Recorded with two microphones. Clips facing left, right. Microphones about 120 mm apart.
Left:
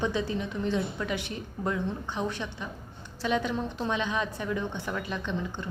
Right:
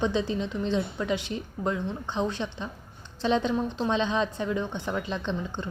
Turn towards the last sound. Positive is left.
turn(degrees=-25)  # may be behind; listen again after turning